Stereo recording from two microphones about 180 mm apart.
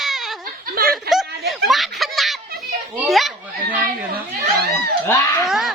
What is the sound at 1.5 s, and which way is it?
Snicker, centre (ahead or behind).